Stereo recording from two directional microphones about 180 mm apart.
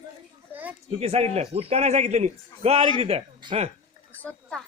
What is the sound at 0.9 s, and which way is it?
A man's voice, 35° right (ahead or behind).